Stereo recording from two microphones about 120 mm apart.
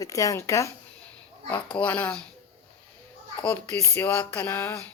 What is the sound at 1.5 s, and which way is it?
Speech, 10° left (ahead or behind).